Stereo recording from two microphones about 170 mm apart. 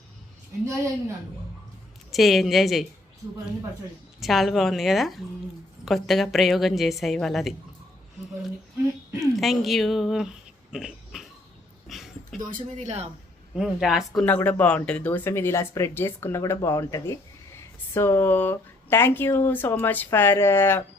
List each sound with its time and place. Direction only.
0.6 s speech: 15° right (ahead or behind)
2.1 s a woman's voice: centre (ahead or behind)
4.2 s a woman's voice: centre (ahead or behind)
9.2 s speech: centre (ahead or behind)
11.9 s dog: centre (ahead or behind)
12.5 s speech: 50° right (ahead or behind)
13.6 s a woman's voice: centre (ahead or behind)
14.2 s speech: 10° left (ahead or behind)